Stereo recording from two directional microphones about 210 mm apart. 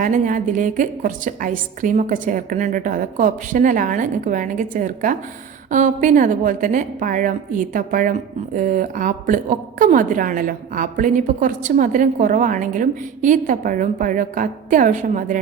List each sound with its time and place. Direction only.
0.0 s a woman's voice: 40° right (ahead or behind)